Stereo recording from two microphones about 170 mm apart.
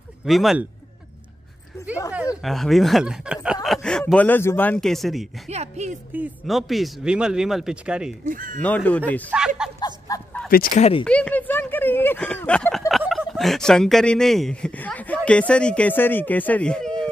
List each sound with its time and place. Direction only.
0.2 s speech: centre (ahead or behind)
2.4 s speech: centre (ahead or behind)
5.5 s speech: 40° right (ahead or behind)
6.1 s speech: 5° right (ahead or behind)
8.3 s speech: 50° right (ahead or behind)
8.6 s speech: 10° left (ahead or behind)
9.8 s a sound: 20° left (ahead or behind)
10.5 s speech: 55° left (ahead or behind)
10.8 s speech: 35° left (ahead or behind)
11.1 s speech: 5° left (ahead or behind)